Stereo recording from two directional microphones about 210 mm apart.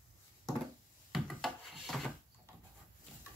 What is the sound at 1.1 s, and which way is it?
Wood, centre (ahead or behind).